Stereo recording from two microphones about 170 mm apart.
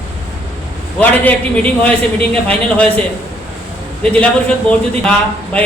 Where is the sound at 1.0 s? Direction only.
10° left (ahead or behind).